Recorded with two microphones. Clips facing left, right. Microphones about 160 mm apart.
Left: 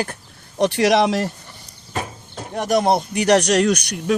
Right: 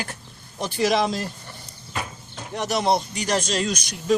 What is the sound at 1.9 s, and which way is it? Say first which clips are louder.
Speech: left 4 dB; 45° left (ahead or behind).